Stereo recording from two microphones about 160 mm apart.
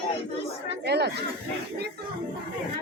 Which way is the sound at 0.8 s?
90° right.